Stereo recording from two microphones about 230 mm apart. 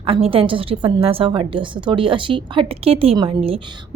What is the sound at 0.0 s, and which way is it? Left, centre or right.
A woman's voice, right.